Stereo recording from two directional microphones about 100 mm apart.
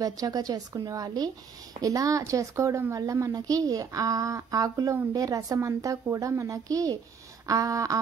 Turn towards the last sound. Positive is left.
turn(degrees=-35)  # may be behind; listen again after turning